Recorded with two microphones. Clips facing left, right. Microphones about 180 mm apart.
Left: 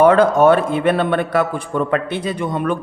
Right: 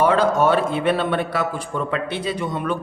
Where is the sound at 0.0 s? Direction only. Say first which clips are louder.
Left 6 dB; 55° left (ahead or behind).